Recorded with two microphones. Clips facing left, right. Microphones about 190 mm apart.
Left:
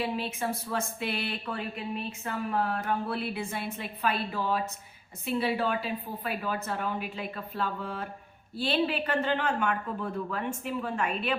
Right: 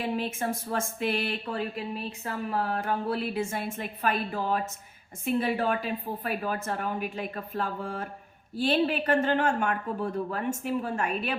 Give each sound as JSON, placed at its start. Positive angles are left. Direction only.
{"t": 0.0, "sound": "speech", "side_deg": -45}